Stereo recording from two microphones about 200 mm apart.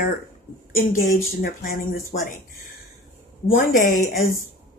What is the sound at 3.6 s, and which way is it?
Speech, 40° left (ahead or behind).